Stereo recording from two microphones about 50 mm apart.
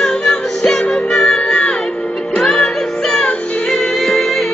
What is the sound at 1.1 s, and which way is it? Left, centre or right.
Music, centre.